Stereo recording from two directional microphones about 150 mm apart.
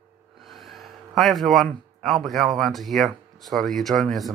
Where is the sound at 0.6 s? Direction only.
Centre (ahead or behind).